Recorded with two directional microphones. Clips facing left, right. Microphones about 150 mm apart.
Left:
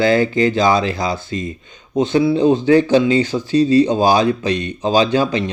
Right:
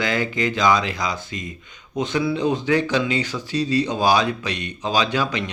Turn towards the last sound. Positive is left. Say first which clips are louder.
# left 7 dB
turn(degrees=30)  # may be behind; listen again after turning